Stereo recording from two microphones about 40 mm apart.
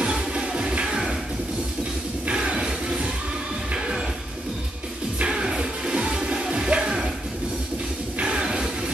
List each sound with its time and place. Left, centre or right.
0.0 s music: right
2.2 s music: right
5.2 s music: right
8.2 s music: right